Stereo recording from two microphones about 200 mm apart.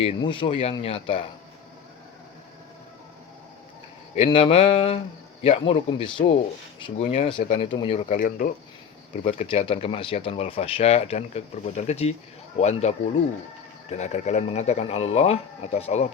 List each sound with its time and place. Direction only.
0.0 s speech: 25° left (ahead or behind)
4.1 s speech: 30° left (ahead or behind)
8.1 s speech: 45° left (ahead or behind)
9.2 s speech: 30° left (ahead or behind)
13.9 s speech: 35° left (ahead or behind)